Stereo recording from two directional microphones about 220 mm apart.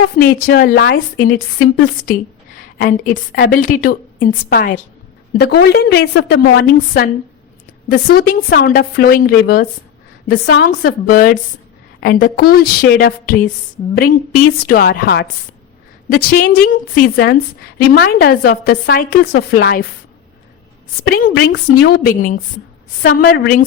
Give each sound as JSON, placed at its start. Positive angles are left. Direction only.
{"t": 0.3, "sound": "a woman's voice", "side_deg": 45}
{"t": 17.7, "sound": "a woman's voice", "side_deg": 50}
{"t": 21.0, "sound": "a woman's voice", "side_deg": 45}